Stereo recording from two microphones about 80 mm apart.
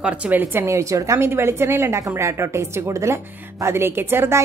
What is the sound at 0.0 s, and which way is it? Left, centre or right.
Speech, right.